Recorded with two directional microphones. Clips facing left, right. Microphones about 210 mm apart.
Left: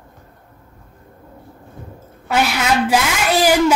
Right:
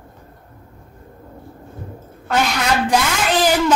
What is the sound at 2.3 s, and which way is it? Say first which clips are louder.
A woman's voice: left 1 dB; 10° left (ahead or behind).